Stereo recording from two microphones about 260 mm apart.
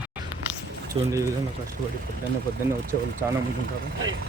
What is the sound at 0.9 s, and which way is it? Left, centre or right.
Speech, centre.